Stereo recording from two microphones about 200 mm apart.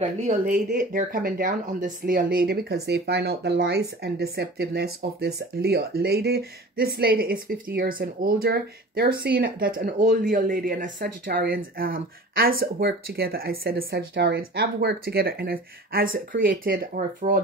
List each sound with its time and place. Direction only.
0.5 s speech: 40° right (ahead or behind)